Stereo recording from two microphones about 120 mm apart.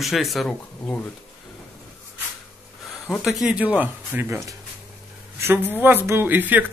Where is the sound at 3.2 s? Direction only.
5° right (ahead or behind).